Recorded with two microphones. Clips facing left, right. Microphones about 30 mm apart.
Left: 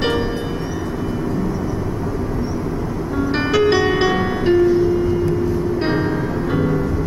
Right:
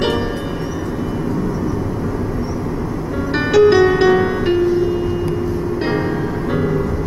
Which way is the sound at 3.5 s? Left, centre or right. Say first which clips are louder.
Right 6 dB; left.